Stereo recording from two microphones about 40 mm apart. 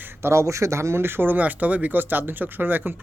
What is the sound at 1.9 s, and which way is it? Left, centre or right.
Speech, right.